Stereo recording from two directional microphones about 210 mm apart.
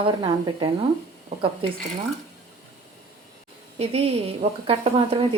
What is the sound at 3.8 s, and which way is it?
Speech, 30° right (ahead or behind).